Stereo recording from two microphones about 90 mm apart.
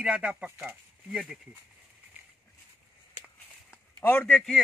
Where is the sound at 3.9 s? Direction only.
20° left (ahead or behind).